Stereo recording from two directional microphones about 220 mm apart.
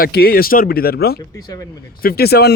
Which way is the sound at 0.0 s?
45° left (ahead or behind).